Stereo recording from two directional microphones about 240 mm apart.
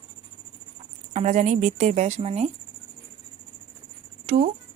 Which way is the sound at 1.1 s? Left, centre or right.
Right.